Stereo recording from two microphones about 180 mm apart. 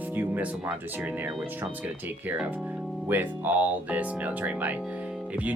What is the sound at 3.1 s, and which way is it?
Speech, 10° right (ahead or behind).